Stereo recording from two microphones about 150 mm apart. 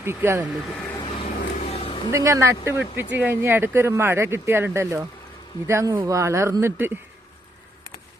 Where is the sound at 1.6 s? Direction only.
40° left (ahead or behind).